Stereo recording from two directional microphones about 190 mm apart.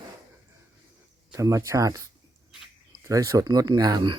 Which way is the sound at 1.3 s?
15° right (ahead or behind).